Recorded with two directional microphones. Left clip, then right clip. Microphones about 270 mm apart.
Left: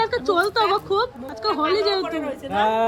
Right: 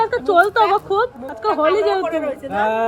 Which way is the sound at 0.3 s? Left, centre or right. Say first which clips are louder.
Right 7 dB; centre.